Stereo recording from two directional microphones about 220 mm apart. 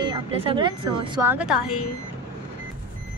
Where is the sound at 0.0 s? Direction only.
25° right (ahead or behind).